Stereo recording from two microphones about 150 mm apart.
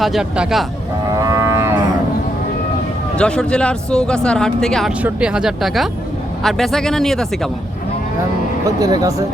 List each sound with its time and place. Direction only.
0.0 s speech: centre (ahead or behind)
1.2 s livestock: 20° right (ahead or behind)
3.2 s speech: 5° left (ahead or behind)
8.6 s speech: 25° right (ahead or behind)